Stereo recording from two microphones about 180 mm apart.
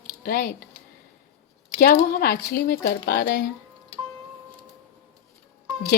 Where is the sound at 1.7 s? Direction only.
55° left (ahead or behind).